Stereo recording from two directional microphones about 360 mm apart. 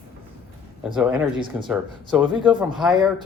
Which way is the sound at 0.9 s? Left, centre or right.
Centre.